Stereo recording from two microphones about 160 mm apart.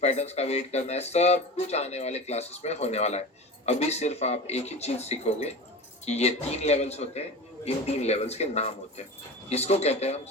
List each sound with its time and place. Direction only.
0.0 s speech: 40° left (ahead or behind)